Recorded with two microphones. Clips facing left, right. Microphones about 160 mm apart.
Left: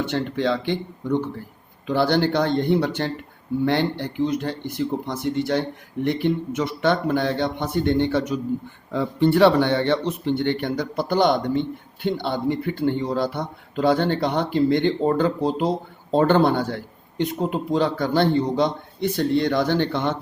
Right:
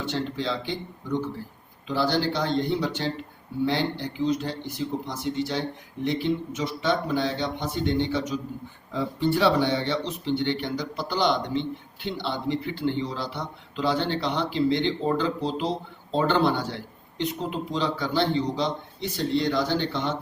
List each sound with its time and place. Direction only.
0.1 s a man's voice: 60° left (ahead or behind)